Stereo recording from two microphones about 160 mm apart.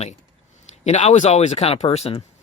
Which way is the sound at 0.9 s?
45° left (ahead or behind).